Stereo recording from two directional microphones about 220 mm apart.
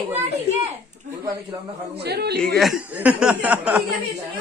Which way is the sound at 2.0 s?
50° right (ahead or behind).